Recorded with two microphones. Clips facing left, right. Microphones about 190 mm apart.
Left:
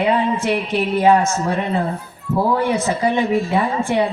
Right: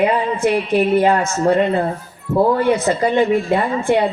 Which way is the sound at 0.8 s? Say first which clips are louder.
Left 1 dB; 60° right (ahead or behind).